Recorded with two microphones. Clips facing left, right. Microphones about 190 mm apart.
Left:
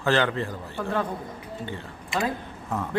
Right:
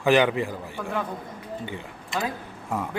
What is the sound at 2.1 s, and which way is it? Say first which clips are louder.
Speech: left 2 dB; 5° right (ahead or behind).